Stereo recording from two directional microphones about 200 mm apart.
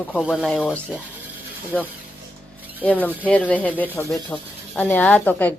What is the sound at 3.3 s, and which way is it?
Speech, 5° left (ahead or behind).